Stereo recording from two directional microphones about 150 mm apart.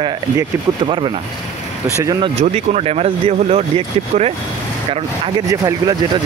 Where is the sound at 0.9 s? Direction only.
35° right (ahead or behind).